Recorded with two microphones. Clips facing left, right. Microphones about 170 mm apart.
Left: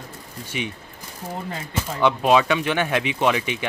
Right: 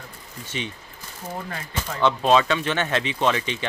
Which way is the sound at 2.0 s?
10° left (ahead or behind).